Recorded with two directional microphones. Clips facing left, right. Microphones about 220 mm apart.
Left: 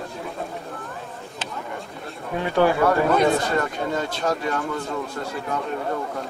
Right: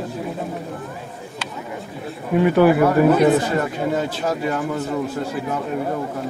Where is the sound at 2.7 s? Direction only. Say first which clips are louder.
Right 3 dB; 20° right (ahead or behind).